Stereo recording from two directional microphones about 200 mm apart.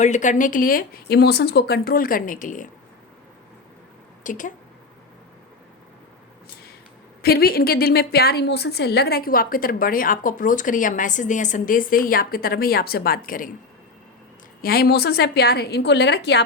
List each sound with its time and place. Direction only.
0.0 s a woman's voice: 35° left (ahead or behind)
4.2 s speech: 40° left (ahead or behind)
7.2 s a woman's voice: 50° left (ahead or behind)
14.6 s a woman's voice: 50° left (ahead or behind)